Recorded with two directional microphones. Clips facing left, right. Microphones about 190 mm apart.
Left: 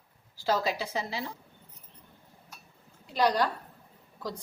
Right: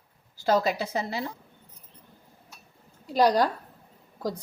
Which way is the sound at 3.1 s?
40° right (ahead or behind).